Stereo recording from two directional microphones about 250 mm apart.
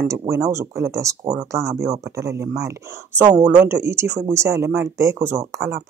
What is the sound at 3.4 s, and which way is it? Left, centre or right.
Speech, right.